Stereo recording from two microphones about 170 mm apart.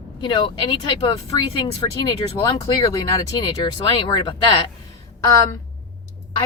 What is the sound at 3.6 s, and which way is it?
Speech, 30° left (ahead or behind).